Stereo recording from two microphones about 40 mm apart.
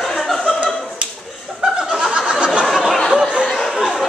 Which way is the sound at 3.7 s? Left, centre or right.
Centre.